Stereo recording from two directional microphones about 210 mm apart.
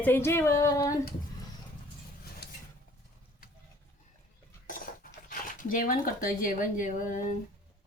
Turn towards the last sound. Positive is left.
turn(degrees=35)  # may be behind; listen again after turning